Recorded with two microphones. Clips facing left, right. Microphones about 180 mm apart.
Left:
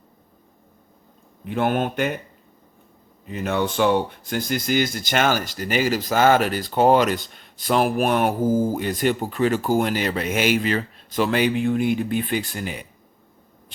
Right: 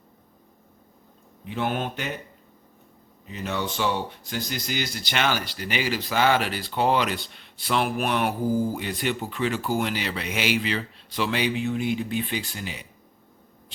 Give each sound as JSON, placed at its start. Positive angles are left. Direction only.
{"t": 1.5, "sound": "speech", "side_deg": 55}
{"t": 3.2, "sound": "speech", "side_deg": 55}